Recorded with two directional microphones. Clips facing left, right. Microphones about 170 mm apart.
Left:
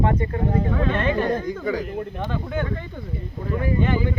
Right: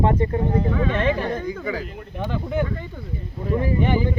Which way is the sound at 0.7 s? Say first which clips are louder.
Even; 5° right (ahead or behind).